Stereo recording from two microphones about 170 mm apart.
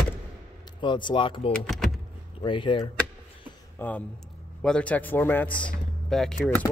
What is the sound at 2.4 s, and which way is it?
Speech, 30° left (ahead or behind).